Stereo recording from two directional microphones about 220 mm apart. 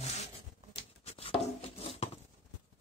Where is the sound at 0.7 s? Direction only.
25° left (ahead or behind).